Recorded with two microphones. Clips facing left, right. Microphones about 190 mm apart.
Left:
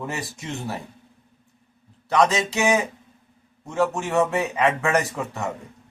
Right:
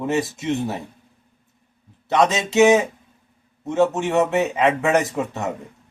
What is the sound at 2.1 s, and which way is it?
A man's voice, 20° right (ahead or behind).